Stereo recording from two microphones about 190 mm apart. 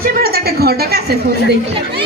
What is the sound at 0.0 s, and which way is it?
A woman's voice, 50° right (ahead or behind).